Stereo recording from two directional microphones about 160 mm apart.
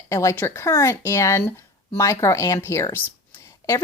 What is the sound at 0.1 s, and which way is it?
Speech, 20° left (ahead or behind).